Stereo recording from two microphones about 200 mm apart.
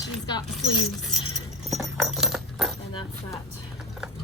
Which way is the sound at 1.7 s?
Centre (ahead or behind).